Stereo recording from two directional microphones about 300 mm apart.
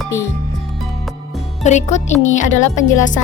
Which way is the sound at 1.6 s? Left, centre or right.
Left.